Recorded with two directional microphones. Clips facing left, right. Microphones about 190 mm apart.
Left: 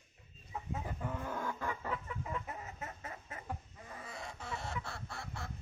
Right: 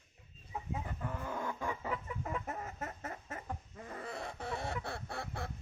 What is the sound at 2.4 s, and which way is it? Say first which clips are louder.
Chicken: right 4 dB; 45° right (ahead or behind).